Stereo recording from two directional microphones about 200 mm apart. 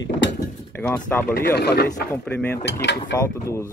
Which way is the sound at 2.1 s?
10° left (ahead or behind).